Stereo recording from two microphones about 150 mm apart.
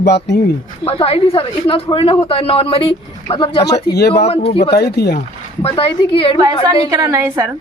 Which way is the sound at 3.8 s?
90° left.